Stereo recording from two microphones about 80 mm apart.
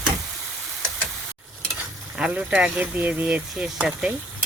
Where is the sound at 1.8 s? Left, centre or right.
Centre.